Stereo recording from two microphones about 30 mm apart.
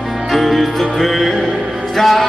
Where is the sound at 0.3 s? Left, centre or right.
Centre.